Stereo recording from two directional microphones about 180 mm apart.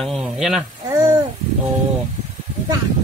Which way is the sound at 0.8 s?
20° right (ahead or behind).